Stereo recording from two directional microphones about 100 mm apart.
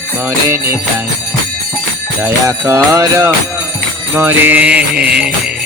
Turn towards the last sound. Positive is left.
turn(degrees=-10)  # may be behind; listen again after turning